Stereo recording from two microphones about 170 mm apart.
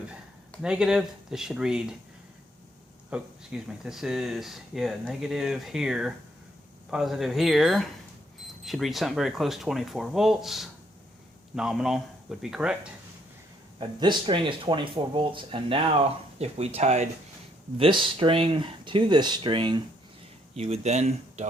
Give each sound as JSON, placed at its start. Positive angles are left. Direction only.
{"t": 0.6, "sound": "speech", "side_deg": -5}
{"t": 3.1, "sound": "speech", "side_deg": -5}
{"t": 13.7, "sound": "speech", "side_deg": -30}
{"t": 17.7, "sound": "speech", "side_deg": -30}
{"t": 20.6, "sound": "speech", "side_deg": -40}